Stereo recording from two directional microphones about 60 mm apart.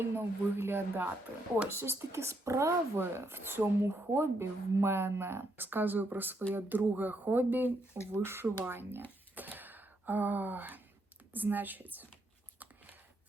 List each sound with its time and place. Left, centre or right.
0.0 s speech: right
3.0 s speech: right
8.1 s speech: right
9.3 s a sound: right
11.3 s speech: right